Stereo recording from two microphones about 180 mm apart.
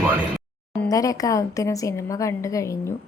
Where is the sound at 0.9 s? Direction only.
20° left (ahead or behind).